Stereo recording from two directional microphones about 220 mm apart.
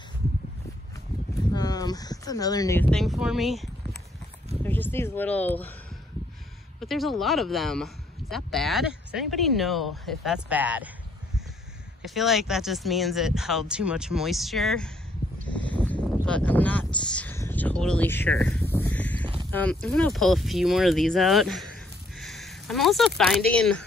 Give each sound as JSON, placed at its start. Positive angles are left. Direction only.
{"t": 1.5, "sound": "speech", "side_deg": 15}
{"t": 4.6, "sound": "speech", "side_deg": 10}
{"t": 6.8, "sound": "speech", "side_deg": 0}
{"t": 12.0, "sound": "speech", "side_deg": 0}
{"t": 15.4, "sound": "a sound", "side_deg": 5}
{"t": 19.5, "sound": "speech", "side_deg": 5}